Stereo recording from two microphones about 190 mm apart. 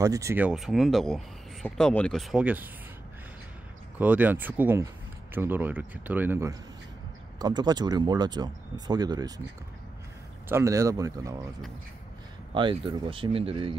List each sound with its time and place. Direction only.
0.0 s speech: 15° right (ahead or behind)
4.0 s a man's voice: 10° right (ahead or behind)
10.5 s a man's voice: 15° right (ahead or behind)
12.5 s speech: 25° right (ahead or behind)